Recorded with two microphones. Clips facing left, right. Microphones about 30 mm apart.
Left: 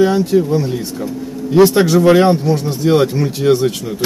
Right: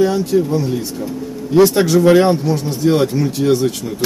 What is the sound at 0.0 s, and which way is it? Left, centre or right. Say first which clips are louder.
Speech: left 2 dB; centre.